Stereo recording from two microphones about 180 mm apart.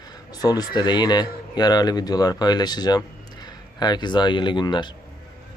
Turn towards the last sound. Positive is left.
turn(degrees=25)  # may be behind; listen again after turning